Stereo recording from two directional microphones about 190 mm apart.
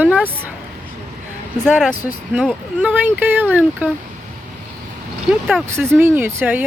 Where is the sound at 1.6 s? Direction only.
Centre (ahead or behind).